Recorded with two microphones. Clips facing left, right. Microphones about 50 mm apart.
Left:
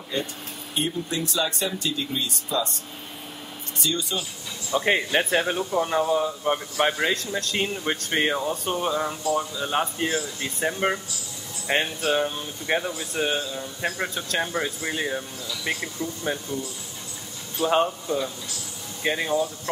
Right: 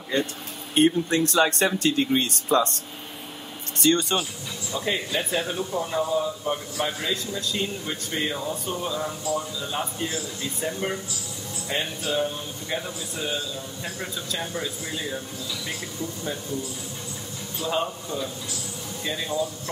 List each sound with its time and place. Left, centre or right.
0.7 s speech: right
3.8 s speech: right
4.7 s a man's voice: left
7.3 s speech: left
7.6 s a man's voice: left
17.6 s speech: left
19.0 s speech: left